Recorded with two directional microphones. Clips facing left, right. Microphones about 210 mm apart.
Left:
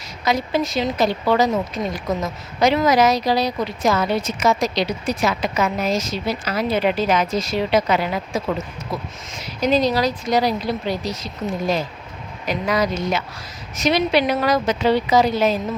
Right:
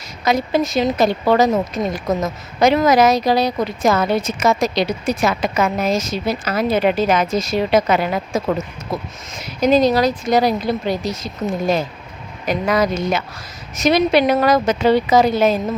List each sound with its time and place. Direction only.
0.3 s speech: 45° right (ahead or behind)
12.5 s speech: 50° right (ahead or behind)